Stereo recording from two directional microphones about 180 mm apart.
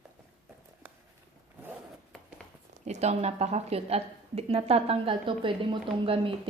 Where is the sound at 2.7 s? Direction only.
40° right (ahead or behind).